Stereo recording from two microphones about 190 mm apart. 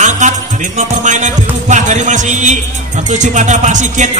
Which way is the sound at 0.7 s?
40° right (ahead or behind).